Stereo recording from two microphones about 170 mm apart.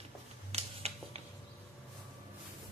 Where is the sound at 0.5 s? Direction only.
35° right (ahead or behind).